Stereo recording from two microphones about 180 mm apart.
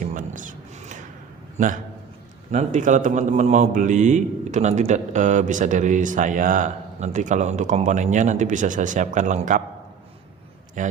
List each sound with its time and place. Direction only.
0.0 s a sound: 45° right (ahead or behind)
1.5 s a man's voice: 45° right (ahead or behind)
10.8 s a man's voice: 45° right (ahead or behind)